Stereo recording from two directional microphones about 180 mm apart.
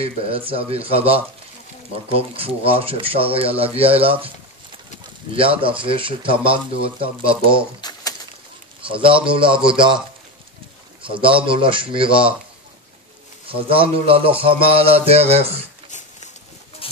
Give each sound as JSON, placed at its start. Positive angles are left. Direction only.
{"t": 0.0, "sound": "speech", "side_deg": -30}
{"t": 5.3, "sound": "speech", "side_deg": -30}
{"t": 7.8, "sound": "a sound", "side_deg": 25}
{"t": 8.8, "sound": "a man's voice", "side_deg": -30}
{"t": 13.5, "sound": "speech", "side_deg": -30}
{"t": 16.8, "sound": "a sound", "side_deg": 30}